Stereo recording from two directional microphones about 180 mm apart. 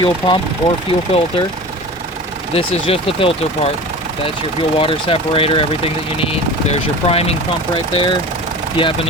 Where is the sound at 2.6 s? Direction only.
30° left (ahead or behind).